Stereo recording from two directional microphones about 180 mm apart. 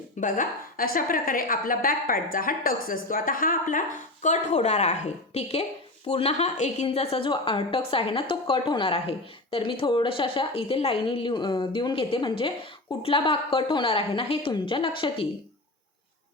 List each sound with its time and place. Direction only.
0.2 s a woman's voice: 50° left (ahead or behind); by 15.3 s 30° left (ahead or behind)